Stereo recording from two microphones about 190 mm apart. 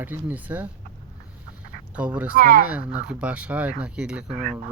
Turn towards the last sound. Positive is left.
turn(degrees=-5)  # may be behind; listen again after turning